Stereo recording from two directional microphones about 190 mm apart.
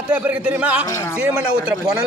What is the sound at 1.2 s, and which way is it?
Speech, 5° right (ahead or behind).